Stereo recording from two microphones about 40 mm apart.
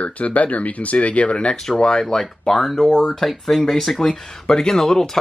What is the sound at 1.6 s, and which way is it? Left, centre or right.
Speech, centre.